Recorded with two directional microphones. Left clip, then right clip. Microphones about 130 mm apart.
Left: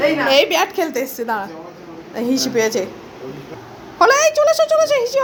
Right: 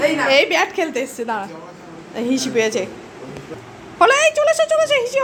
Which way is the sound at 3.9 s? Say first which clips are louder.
Left 1 dB; 5° right (ahead or behind).